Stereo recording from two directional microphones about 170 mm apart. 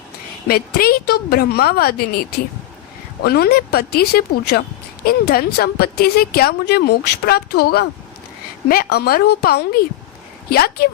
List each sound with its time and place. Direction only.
0.4 s a woman's voice: 65° left (ahead or behind)
3.2 s a woman's voice: 65° left (ahead or behind)